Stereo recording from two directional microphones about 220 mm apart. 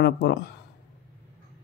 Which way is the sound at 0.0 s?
50° left (ahead or behind).